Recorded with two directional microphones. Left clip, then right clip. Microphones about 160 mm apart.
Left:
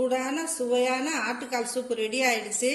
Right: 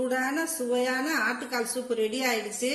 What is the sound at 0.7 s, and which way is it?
A woman's voice, 35° right (ahead or behind).